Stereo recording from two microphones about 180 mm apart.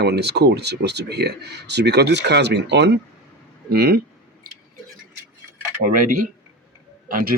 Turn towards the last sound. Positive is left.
turn(degrees=-50)  # may be behind; listen again after turning